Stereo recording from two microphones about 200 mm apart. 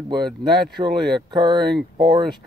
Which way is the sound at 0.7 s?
20° right (ahead or behind).